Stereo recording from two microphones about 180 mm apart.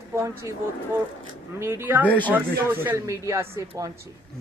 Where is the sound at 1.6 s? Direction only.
15° right (ahead or behind).